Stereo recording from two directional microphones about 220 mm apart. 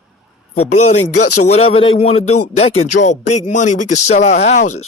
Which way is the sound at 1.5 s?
25° left (ahead or behind).